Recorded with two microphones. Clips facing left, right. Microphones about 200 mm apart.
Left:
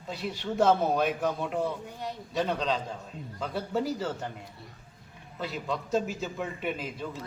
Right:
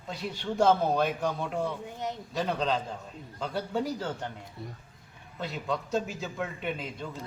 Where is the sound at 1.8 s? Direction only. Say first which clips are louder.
Right 2 dB; 20° right (ahead or behind).